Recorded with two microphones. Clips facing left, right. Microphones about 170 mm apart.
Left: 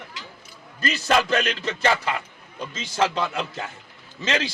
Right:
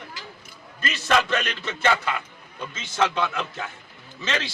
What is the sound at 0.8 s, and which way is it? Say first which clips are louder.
A man's voice: left 1 dB; 35° left (ahead or behind).